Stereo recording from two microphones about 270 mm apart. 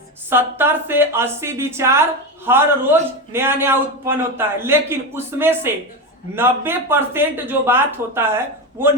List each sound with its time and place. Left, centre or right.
0.3 s a woman's voice: centre